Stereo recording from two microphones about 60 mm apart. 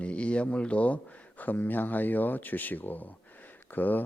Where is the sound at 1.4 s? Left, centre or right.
Left.